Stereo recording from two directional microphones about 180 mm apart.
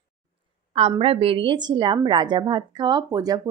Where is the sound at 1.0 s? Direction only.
30° right (ahead or behind).